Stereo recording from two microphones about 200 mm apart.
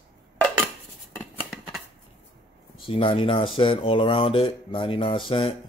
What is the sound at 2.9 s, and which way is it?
Speech, 25° left (ahead or behind).